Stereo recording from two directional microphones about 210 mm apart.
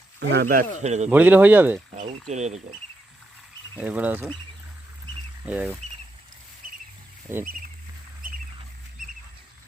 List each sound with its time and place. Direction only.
0.2 s speech: 55° right (ahead or behind)
0.8 s speech: 35° right (ahead or behind)
1.1 s speech: 10° right (ahead or behind)
2.2 s speech: 35° right (ahead or behind)
3.8 s speech: 5° right (ahead or behind)
5.5 s speech: 5° right (ahead or behind)
6.6 s a sound: 40° right (ahead or behind)
7.3 s speech: 10° right (ahead or behind)